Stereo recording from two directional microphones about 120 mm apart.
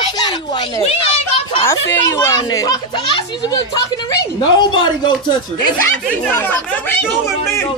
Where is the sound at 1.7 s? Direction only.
30° left (ahead or behind).